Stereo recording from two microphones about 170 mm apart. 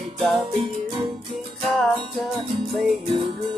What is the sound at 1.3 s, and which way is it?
Music, centre (ahead or behind).